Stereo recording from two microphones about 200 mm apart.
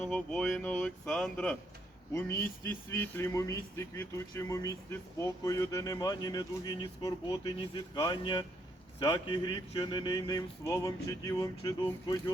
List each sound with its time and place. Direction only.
0.0 s speech: 5° left (ahead or behind)